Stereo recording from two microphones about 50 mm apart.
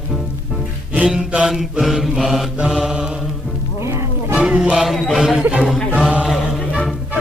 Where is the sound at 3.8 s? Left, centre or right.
Right.